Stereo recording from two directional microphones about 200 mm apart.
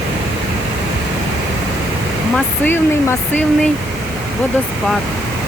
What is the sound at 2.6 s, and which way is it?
Speech, 10° left (ahead or behind).